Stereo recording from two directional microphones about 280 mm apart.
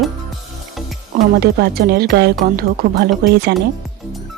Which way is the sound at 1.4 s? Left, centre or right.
Right.